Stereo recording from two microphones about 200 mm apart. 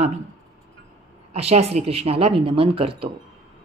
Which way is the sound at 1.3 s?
30° right (ahead or behind).